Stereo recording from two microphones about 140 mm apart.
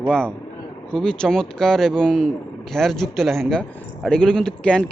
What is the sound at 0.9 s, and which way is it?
A man's voice, 5° left (ahead or behind).